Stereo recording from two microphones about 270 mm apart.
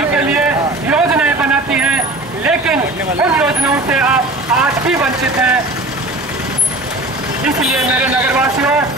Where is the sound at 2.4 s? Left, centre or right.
Centre.